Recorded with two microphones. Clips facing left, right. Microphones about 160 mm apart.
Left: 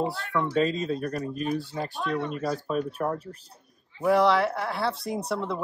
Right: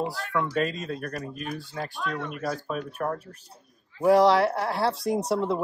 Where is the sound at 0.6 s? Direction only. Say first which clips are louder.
Left 3 dB; 5° right (ahead or behind).